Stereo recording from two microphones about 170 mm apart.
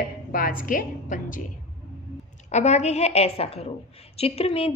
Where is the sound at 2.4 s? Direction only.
40° left (ahead or behind).